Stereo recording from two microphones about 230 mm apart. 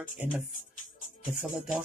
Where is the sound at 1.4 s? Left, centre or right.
Centre.